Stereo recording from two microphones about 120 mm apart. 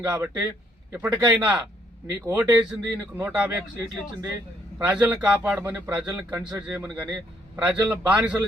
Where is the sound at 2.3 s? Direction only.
10° right (ahead or behind).